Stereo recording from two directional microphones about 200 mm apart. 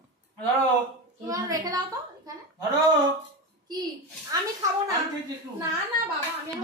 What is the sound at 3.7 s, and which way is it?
Speech, 20° right (ahead or behind).